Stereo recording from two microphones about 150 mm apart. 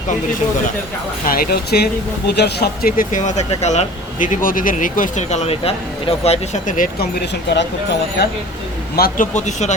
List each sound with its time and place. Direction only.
1.3 s speech: 85° left
8.2 s speech: 90° left
9.0 s speech: 80° left
9.3 s speech: 50° left (ahead or behind)